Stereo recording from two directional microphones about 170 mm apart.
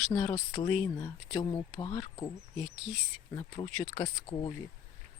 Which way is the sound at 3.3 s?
25° left (ahead or behind).